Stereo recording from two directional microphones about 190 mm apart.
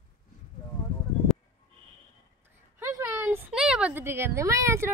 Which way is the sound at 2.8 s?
15° right (ahead or behind).